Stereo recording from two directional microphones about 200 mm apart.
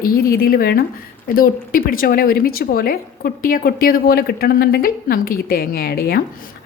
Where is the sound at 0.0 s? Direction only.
50° left (ahead or behind).